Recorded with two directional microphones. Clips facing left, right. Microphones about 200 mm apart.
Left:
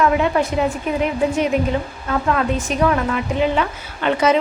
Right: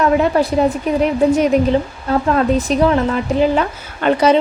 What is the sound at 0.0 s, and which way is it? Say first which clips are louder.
Speech: right 3 dB; 35° right (ahead or behind).